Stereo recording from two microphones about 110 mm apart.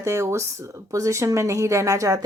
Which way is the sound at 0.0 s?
25° right (ahead or behind).